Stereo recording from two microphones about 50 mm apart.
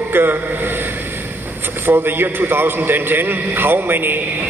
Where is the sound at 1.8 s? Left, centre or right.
Right.